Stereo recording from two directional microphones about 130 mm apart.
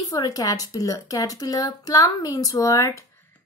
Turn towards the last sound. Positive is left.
turn(degrees=25)  # may be behind; listen again after turning